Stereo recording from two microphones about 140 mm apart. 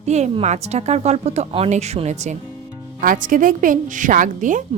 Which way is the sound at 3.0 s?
75° right (ahead or behind).